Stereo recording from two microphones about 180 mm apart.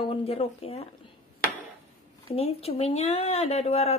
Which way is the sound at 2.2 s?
35° left (ahead or behind).